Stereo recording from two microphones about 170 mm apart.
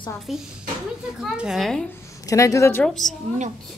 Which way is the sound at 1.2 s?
Centre (ahead or behind).